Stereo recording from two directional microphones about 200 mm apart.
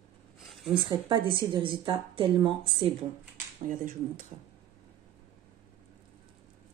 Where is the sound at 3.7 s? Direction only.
40° right (ahead or behind).